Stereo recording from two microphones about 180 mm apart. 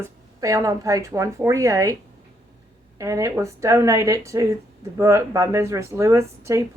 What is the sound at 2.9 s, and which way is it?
A woman's voice, 15° right (ahead or behind).